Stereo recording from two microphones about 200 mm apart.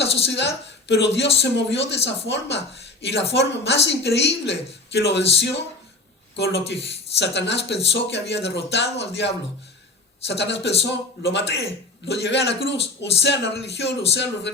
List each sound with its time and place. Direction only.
0.0 s speech: 60° left (ahead or behind)